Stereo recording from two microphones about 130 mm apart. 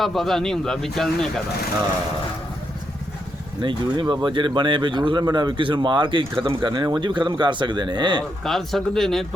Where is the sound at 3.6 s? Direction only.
35° right (ahead or behind).